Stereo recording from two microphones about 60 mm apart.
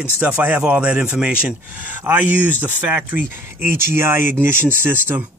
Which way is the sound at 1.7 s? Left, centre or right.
Right.